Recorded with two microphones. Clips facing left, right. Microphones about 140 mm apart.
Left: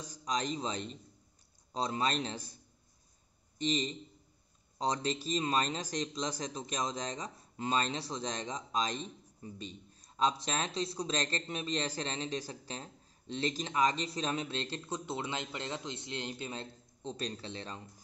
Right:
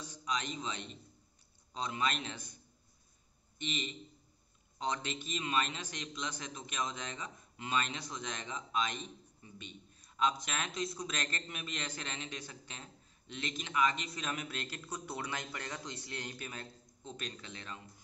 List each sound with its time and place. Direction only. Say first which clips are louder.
0.0 s a man's voice: left 3 dB; 40° left (ahead or behind)